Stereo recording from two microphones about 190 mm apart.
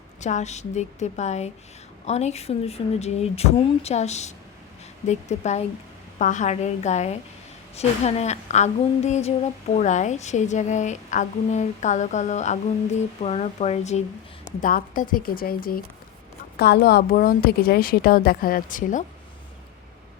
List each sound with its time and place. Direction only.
0.2 s a woman's voice: 40° left (ahead or behind)
14.4 s a woman's voice: 45° left (ahead or behind)
16.6 s a woman's voice: 60° left (ahead or behind); by 19.0 s 45° left (ahead or behind)